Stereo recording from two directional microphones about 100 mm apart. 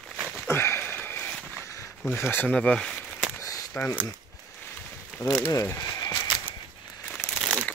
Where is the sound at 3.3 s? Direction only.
35° left (ahead or behind).